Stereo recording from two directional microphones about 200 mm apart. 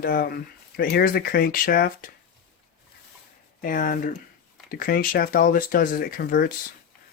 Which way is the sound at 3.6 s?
45° left (ahead or behind).